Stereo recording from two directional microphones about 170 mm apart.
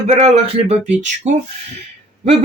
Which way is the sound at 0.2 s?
35° right (ahead or behind).